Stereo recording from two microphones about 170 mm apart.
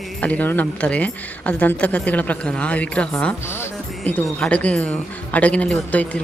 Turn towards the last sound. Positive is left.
turn(degrees=10)  # may be behind; listen again after turning